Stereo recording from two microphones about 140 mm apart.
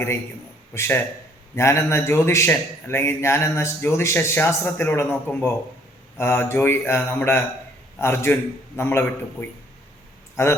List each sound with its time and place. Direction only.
0.7 s a man's voice: 15° left (ahead or behind)